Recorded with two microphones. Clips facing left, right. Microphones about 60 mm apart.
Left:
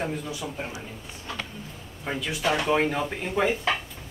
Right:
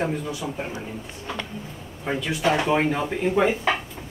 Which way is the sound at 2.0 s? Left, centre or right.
Centre.